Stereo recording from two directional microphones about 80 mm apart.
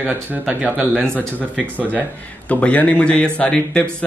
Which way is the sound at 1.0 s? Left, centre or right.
Centre.